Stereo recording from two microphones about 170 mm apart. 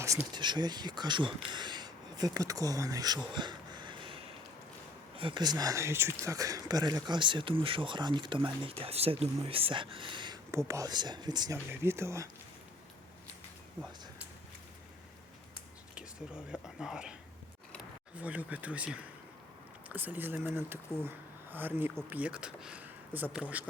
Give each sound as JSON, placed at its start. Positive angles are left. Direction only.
{"t": 0.0, "sound": "speech", "side_deg": -20}
{"t": 3.3, "sound": "a sound", "side_deg": -25}
{"t": 5.1, "sound": "speech", "side_deg": -30}
{"t": 16.0, "sound": "speech", "side_deg": -5}
{"t": 18.2, "sound": "speech", "side_deg": -10}